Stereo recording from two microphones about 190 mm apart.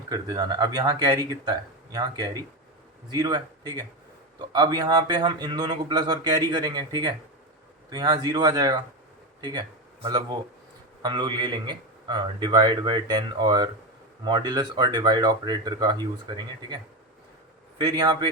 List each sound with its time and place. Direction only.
0.1 s a man's voice: 20° right (ahead or behind)